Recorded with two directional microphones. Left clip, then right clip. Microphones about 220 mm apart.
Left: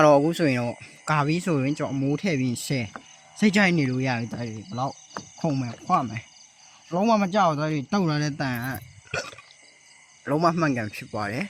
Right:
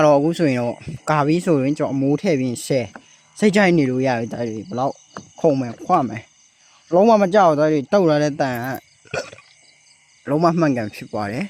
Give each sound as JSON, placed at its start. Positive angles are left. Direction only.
{"t": 0.0, "sound": "speech", "side_deg": -10}